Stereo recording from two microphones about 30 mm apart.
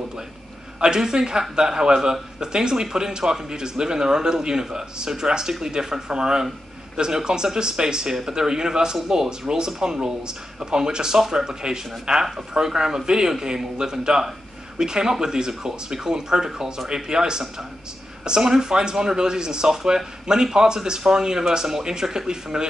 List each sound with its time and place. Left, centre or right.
0.7 s speech: right